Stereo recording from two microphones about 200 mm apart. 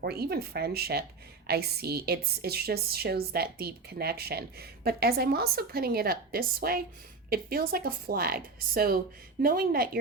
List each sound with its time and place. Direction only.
0.0 s a woman's voice: 50° right (ahead or behind)